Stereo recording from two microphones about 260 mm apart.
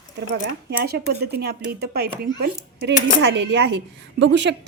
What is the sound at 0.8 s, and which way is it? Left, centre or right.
Speech, right.